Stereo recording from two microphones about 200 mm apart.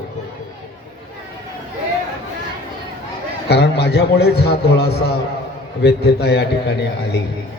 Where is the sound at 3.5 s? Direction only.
55° left (ahead or behind).